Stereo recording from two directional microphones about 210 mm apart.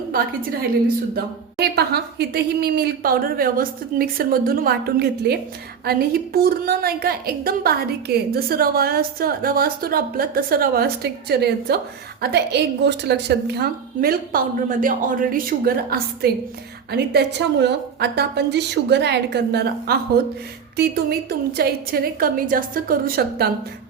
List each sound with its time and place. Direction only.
1.1 s a woman's voice: 50° right (ahead or behind)